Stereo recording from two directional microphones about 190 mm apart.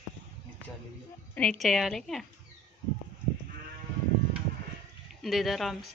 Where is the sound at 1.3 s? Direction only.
Centre (ahead or behind).